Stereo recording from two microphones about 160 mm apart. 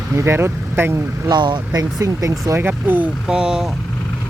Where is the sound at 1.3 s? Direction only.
30° right (ahead or behind); by 3.7 s 5° right (ahead or behind).